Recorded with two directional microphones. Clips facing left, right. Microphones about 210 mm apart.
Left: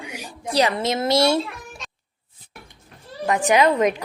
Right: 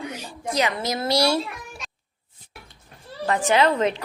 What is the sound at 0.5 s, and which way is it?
Speech, 30° left (ahead or behind).